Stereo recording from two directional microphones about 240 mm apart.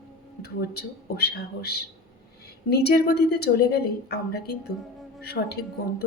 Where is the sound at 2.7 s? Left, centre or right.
Left.